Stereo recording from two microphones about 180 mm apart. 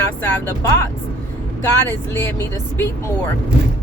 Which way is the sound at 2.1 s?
10° left (ahead or behind).